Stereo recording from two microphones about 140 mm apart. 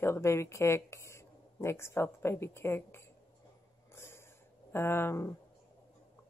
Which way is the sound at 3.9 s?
20° left (ahead or behind).